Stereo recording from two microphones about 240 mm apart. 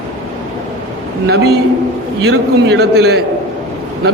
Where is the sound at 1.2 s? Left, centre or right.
Right.